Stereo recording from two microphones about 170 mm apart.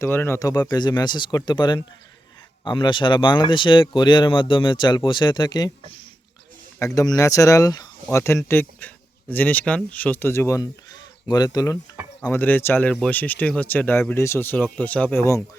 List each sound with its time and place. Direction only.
0.0 s speech: 15° left (ahead or behind)